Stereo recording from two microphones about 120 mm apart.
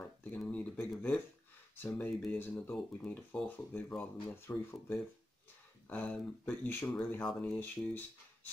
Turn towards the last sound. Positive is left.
turn(degrees=15)  # may be behind; listen again after turning